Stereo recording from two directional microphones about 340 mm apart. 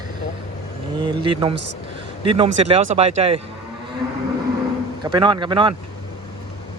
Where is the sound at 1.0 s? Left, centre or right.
Centre.